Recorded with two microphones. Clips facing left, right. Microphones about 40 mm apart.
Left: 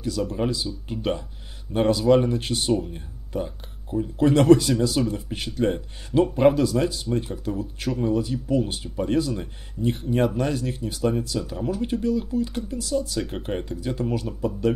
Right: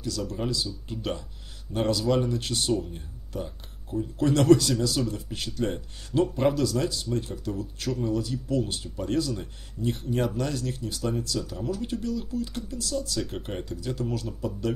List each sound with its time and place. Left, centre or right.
0.0 s speech: left